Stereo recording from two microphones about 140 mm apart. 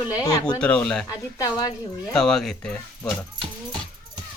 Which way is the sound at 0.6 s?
5° left (ahead or behind).